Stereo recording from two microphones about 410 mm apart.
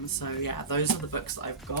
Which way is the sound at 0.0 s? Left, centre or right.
Left.